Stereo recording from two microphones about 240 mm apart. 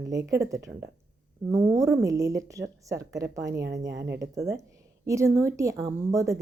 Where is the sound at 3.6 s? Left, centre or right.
Right.